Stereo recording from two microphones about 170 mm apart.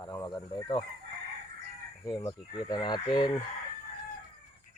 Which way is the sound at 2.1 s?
25° left (ahead or behind).